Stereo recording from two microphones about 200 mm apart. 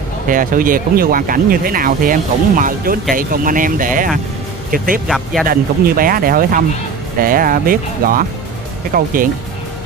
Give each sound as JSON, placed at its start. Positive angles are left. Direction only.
{"t": 0.3, "sound": "speech", "side_deg": -45}
{"t": 5.0, "sound": "speech", "side_deg": 0}
{"t": 5.5, "sound": "speech", "side_deg": -45}